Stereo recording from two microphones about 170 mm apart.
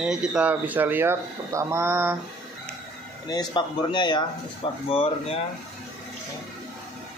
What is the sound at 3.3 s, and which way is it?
Speech, 25° left (ahead or behind).